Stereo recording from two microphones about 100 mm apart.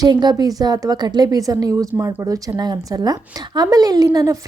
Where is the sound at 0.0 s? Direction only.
45° right (ahead or behind).